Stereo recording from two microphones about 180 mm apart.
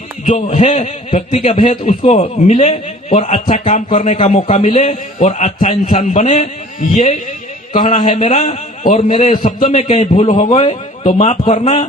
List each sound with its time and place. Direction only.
0.3 s a man's voice: 35° left (ahead or behind)
3.7 s a man's voice: 45° left (ahead or behind)
9.0 s a man's voice: 30° left (ahead or behind)